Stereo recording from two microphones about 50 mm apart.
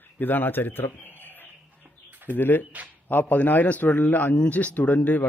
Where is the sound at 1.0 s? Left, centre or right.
Left.